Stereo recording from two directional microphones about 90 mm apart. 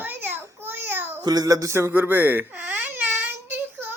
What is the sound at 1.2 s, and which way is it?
Speech, 45° right (ahead or behind).